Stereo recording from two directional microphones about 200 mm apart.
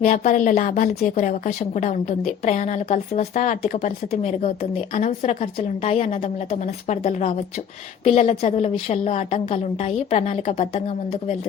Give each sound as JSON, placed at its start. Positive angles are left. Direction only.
{"t": 0.0, "sound": "a woman's voice", "side_deg": 40}